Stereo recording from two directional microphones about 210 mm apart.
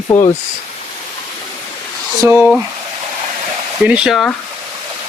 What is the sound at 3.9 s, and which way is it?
Speech, 5° right (ahead or behind).